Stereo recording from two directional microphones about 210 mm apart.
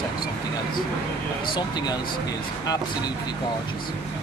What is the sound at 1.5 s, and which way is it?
Speech, 20° left (ahead or behind).